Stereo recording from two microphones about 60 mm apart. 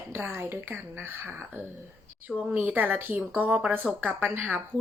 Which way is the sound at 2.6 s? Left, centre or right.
Right.